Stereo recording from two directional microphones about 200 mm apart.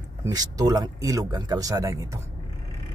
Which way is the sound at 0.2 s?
20° right (ahead or behind).